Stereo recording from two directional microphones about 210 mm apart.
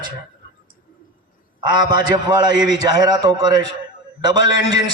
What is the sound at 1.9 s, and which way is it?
A man's voice, 20° right (ahead or behind).